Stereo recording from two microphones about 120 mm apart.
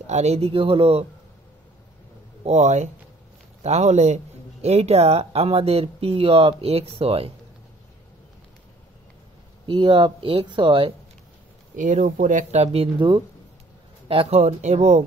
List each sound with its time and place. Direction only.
0.0 s speech: 70° right (ahead or behind); by 1.0 s 55° right (ahead or behind)
2.4 s speech: 65° right (ahead or behind)
9.7 s speech: 40° right (ahead or behind)
11.7 s speech: 90° right; by 15.0 s 70° right (ahead or behind)